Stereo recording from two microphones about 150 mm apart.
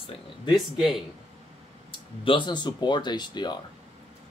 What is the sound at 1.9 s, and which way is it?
Speech, 35° left (ahead or behind).